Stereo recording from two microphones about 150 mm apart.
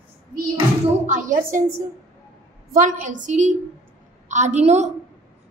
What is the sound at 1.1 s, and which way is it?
Speech, 60° right (ahead or behind).